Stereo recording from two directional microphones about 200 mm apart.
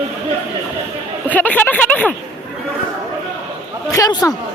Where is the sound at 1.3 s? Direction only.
10° left (ahead or behind).